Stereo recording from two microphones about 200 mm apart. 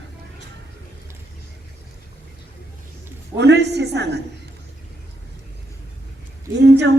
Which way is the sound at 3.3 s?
60° right (ahead or behind).